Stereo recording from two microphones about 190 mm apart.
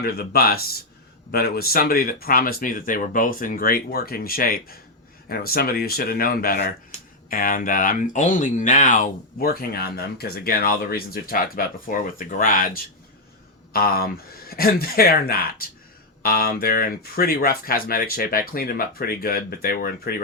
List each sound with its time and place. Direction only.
0.0 s speech: 55° left (ahead or behind)